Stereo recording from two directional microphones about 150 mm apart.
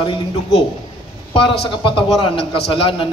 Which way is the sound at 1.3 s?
35° left (ahead or behind).